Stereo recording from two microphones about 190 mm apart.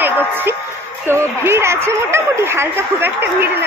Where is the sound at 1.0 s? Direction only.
15° right (ahead or behind).